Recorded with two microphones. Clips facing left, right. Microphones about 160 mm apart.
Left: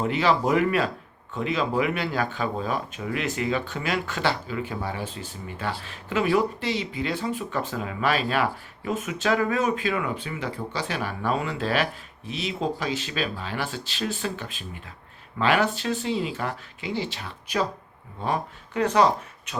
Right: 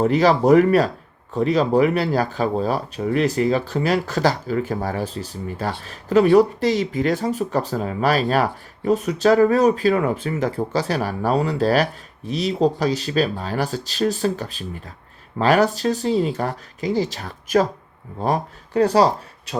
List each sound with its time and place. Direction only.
0.0 s speech: 40° right (ahead or behind)